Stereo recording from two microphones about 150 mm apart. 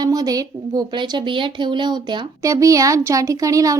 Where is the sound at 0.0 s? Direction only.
25° right (ahead or behind).